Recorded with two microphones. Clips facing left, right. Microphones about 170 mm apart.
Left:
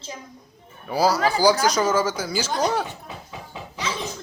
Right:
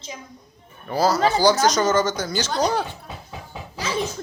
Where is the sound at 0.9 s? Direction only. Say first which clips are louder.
Right 1 dB; 10° left (ahead or behind).